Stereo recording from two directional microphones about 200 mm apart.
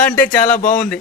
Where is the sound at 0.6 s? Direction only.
45° left (ahead or behind).